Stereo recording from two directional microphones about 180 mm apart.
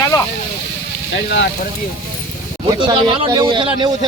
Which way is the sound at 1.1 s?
80° left.